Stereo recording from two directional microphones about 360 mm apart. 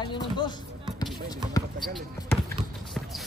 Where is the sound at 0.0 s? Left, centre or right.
Centre.